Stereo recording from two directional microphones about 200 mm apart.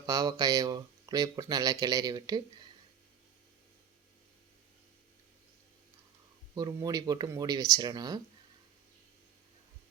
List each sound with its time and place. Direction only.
0.0 s speech: 20° right (ahead or behind)
6.5 s speech: 20° right (ahead or behind)